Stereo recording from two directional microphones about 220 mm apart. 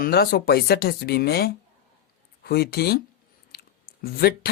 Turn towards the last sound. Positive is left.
turn(degrees=45)  # may be behind; listen again after turning